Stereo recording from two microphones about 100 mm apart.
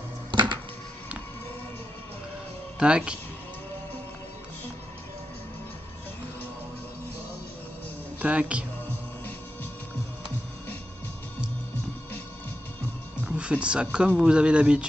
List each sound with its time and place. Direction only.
0.3 s music: 50° right (ahead or behind)
2.8 s speech: 10° right (ahead or behind)
8.2 s speech: 15° right (ahead or behind)
13.2 s speech: 10° right (ahead or behind)